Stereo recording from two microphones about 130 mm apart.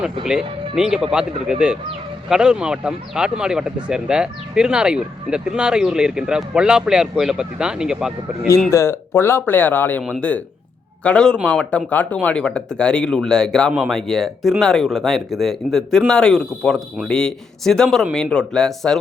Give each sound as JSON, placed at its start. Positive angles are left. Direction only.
{"t": 0.0, "sound": "speech", "side_deg": -5}
{"t": 8.7, "sound": "speech", "side_deg": 20}